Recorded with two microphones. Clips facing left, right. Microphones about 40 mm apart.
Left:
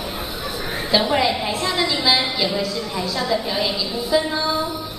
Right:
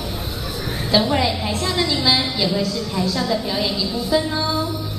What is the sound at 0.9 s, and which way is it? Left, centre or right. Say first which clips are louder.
A woman's voice: even; centre.